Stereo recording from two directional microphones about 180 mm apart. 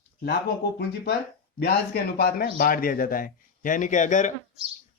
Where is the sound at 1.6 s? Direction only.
60° left (ahead or behind); by 4.3 s 45° left (ahead or behind).